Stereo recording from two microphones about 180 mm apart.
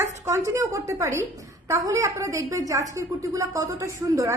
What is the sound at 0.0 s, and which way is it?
A woman's voice, 15° right (ahead or behind).